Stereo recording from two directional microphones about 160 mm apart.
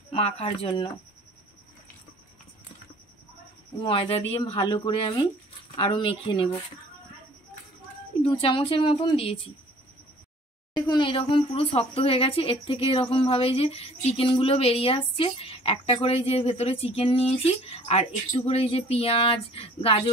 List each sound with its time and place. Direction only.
0.1 s speech: 35° left (ahead or behind)
3.8 s speech: 35° left (ahead or behind)
8.2 s speech: 35° left (ahead or behind)
10.9 s speech: 30° left (ahead or behind)